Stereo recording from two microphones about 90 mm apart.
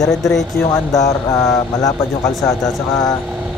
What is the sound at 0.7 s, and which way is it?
Speech, 40° left (ahead or behind).